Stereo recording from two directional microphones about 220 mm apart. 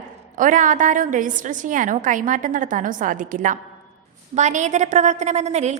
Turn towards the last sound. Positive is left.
turn(degrees=-30)  # may be behind; listen again after turning